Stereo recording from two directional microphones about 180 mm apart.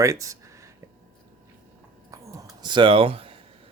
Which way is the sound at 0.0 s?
15° right (ahead or behind).